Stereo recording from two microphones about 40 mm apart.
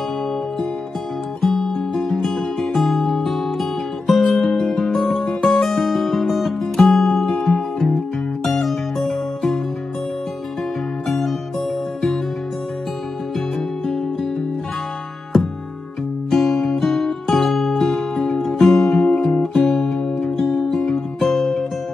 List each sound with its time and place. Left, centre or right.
1.4 s music: centre
11.1 s music: centre
16.3 s music: centre
19.0 s music: left
19.4 s music: centre